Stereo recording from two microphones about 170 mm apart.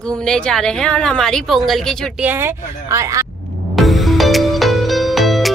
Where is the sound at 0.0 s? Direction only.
5° left (ahead or behind).